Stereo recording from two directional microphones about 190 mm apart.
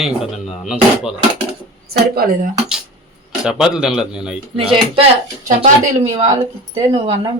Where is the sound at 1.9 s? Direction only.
50° right (ahead or behind).